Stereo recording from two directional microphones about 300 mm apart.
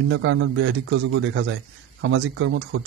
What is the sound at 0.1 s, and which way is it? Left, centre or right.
Speech, right.